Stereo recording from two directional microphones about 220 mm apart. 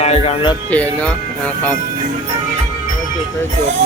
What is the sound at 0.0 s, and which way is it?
Speech, 25° left (ahead or behind).